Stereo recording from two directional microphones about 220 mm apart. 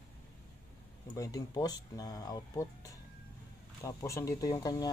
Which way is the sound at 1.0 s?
15° left (ahead or behind).